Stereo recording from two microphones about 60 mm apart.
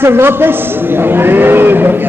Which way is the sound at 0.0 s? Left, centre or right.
Right.